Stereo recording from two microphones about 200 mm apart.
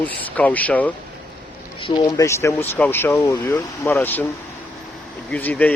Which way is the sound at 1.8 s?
20° left (ahead or behind).